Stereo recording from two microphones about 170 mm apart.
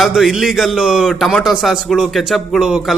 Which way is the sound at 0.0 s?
Centre (ahead or behind).